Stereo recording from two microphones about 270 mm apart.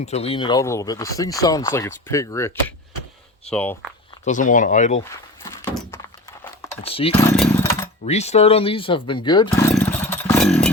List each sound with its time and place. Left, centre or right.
0.0 s speech: left; by 3.9 s centre
4.2 s speech: left
5.1 s walk: centre
6.8 s speech: left; by 10.7 s centre